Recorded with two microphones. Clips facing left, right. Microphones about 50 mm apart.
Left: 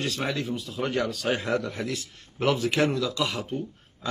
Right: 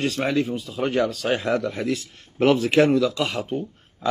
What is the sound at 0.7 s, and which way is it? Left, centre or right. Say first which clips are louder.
Speech: right 4 dB; centre.